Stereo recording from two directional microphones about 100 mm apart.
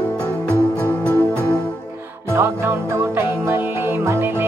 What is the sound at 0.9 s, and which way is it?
Music, 15° left (ahead or behind).